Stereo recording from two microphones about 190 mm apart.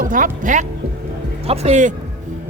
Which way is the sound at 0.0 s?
45° right (ahead or behind).